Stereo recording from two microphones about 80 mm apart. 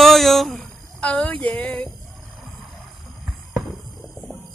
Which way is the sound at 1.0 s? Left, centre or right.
Centre.